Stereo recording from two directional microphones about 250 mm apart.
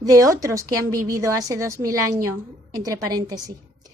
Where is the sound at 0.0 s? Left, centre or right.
Centre.